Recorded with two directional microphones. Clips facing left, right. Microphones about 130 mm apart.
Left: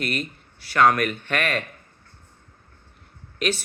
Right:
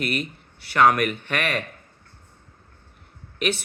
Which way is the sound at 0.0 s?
10° right (ahead or behind).